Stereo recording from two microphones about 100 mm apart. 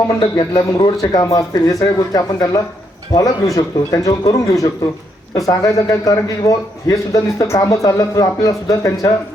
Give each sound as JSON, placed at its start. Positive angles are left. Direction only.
{"t": 0.1, "sound": "speech", "side_deg": 45}
{"t": 1.2, "sound": "a man's voice", "side_deg": 35}